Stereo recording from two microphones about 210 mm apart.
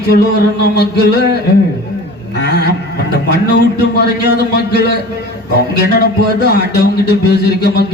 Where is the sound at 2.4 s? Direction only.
50° left (ahead or behind).